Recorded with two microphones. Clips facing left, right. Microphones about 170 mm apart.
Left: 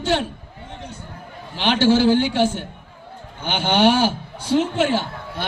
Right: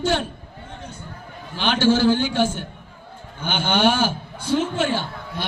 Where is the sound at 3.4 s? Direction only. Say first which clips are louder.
Left 2 dB; 35° left (ahead or behind).